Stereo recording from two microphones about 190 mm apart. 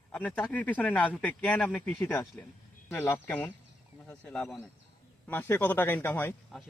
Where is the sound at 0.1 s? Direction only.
10° left (ahead or behind).